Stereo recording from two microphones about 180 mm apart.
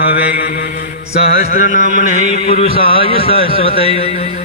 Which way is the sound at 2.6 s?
30° left (ahead or behind).